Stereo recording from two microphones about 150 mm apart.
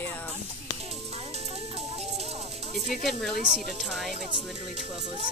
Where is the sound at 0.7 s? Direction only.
45° right (ahead or behind).